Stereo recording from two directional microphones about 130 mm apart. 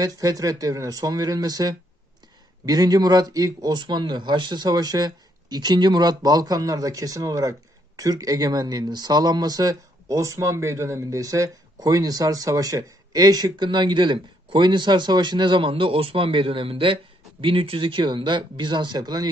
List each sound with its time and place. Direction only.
0.0 s speech: 25° right (ahead or behind)